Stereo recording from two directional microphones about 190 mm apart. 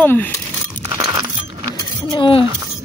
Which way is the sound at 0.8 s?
20° right (ahead or behind).